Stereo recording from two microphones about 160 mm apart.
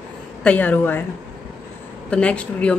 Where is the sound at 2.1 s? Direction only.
5° left (ahead or behind).